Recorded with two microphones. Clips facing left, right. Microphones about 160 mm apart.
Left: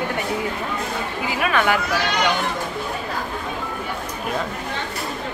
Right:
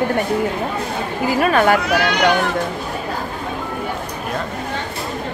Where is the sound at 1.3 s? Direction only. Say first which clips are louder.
Right 6 dB; 40° right (ahead or behind).